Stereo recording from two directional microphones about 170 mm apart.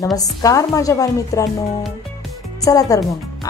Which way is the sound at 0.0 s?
20° left (ahead or behind).